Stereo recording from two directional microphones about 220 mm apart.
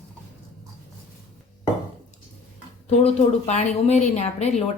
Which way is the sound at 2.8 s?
30° left (ahead or behind).